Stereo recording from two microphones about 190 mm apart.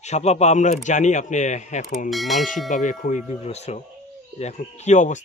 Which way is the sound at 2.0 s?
Centre (ahead or behind).